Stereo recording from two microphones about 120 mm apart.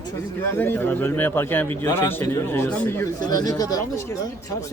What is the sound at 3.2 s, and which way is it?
Speech, 30° left (ahead or behind).